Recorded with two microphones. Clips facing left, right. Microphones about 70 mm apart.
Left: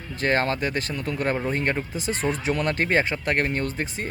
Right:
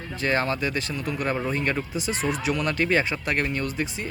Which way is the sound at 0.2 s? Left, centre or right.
Left.